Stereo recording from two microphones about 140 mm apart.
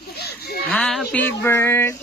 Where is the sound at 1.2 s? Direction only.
15° left (ahead or behind).